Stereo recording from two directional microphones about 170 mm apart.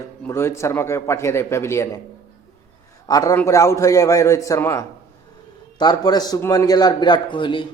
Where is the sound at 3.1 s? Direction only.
20° left (ahead or behind).